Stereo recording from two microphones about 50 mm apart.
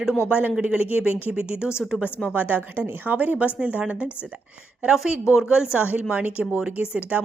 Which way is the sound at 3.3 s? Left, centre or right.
Right.